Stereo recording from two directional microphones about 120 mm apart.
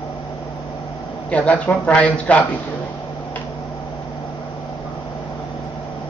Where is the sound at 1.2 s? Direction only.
10° left (ahead or behind).